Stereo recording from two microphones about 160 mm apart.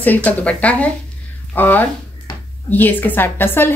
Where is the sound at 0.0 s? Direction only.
10° left (ahead or behind).